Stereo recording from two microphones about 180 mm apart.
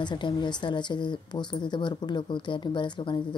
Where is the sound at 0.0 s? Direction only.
25° left (ahead or behind).